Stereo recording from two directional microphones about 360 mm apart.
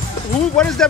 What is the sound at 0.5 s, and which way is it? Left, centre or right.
Speech, centre.